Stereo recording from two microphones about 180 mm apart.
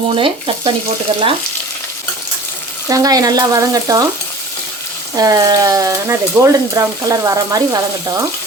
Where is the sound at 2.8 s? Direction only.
20° right (ahead or behind).